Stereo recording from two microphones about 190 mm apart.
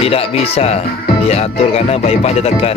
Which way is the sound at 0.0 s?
30° left (ahead or behind).